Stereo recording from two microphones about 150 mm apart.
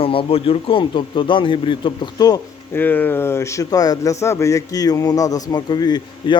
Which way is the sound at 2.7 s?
10° left (ahead or behind).